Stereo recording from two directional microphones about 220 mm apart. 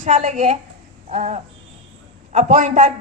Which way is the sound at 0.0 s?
30° right (ahead or behind).